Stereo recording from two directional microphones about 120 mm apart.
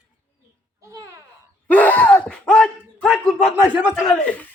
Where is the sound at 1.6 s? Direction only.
15° left (ahead or behind).